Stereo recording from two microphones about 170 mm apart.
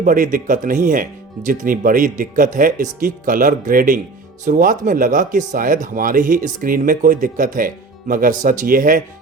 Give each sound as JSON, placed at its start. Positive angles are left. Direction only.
{"t": 0.0, "sound": "speech", "side_deg": -55}